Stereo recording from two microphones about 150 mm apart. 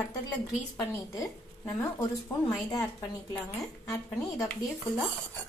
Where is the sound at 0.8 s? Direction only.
20° left (ahead or behind).